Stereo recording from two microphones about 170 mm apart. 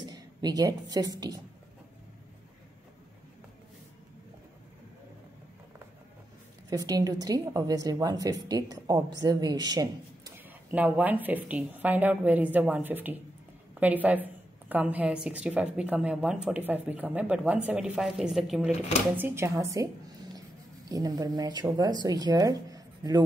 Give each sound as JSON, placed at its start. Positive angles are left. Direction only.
{"t": 0.0, "sound": "a woman's voice", "side_deg": -25}
{"t": 6.7, "sound": "a woman's voice", "side_deg": -20}
{"t": 10.7, "sound": "a woman's voice", "side_deg": -10}
{"t": 19.1, "sound": "a woman's voice", "side_deg": -15}
{"t": 20.9, "sound": "a woman's voice", "side_deg": -20}